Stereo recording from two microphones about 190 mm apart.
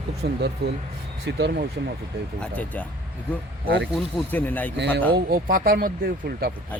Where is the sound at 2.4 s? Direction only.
5° left (ahead or behind).